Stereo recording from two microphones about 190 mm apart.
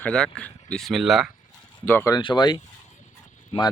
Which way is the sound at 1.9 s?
15° left (ahead or behind).